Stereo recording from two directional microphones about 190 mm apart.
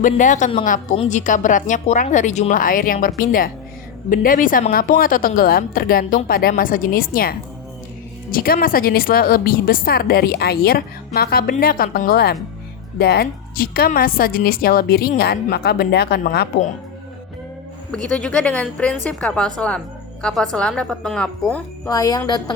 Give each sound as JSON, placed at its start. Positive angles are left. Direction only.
{"t": 0.0, "sound": "a woman's voice", "side_deg": 40}
{"t": 17.9, "sound": "a woman's voice", "side_deg": 5}
{"t": 21.8, "sound": "a woman's voice", "side_deg": 20}